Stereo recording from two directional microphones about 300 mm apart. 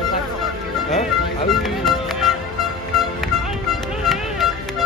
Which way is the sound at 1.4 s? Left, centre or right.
Centre.